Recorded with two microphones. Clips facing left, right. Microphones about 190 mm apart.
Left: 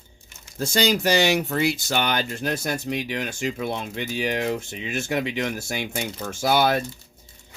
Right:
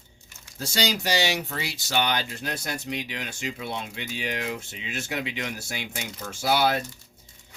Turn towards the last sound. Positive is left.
turn(degrees=50)  # may be behind; listen again after turning